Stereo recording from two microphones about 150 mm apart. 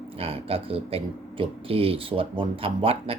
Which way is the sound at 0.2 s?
40° right (ahead or behind).